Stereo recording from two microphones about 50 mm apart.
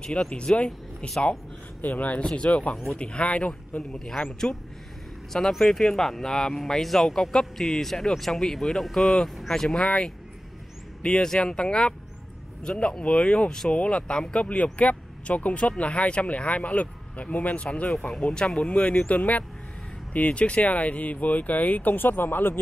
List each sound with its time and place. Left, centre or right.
0.0 s speech: centre
1.8 s speech: left
2.2 s speech: left
4.0 s speech: centre
9.8 s speech: centre
14.4 s speech: left
19.1 s speech: left